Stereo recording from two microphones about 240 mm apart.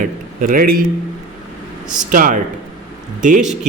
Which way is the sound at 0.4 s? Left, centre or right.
Right.